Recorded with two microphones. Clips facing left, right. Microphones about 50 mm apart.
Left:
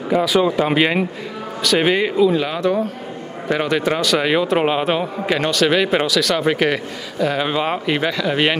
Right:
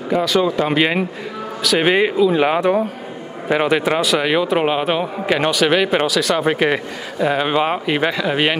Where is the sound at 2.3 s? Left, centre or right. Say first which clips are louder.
Right 3 dB; right.